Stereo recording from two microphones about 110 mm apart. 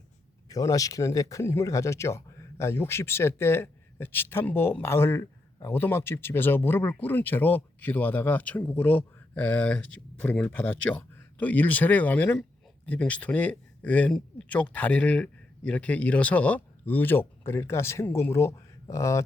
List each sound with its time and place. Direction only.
0.4 s speech: 35° left (ahead or behind)